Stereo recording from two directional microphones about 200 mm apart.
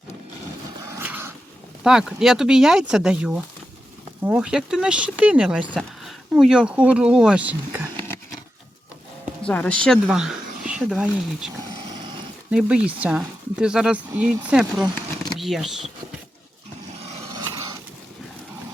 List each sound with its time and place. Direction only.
0.9 s dog: 10° right (ahead or behind)
1.8 s speech: 5° right (ahead or behind)
9.4 s speech: 5° left (ahead or behind)
12.5 s speech: 5° right (ahead or behind)
17.0 s a sound: 25° right (ahead or behind)